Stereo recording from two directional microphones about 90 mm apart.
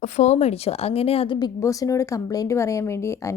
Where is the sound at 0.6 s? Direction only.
90° left.